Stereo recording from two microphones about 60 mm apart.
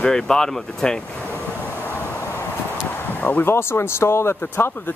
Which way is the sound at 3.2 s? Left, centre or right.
Left.